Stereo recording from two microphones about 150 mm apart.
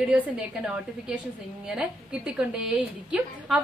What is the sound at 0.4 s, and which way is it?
A woman's voice, 5° right (ahead or behind).